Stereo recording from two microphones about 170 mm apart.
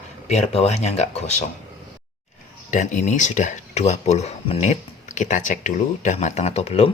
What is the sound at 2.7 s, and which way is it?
Speech, 45° left (ahead or behind).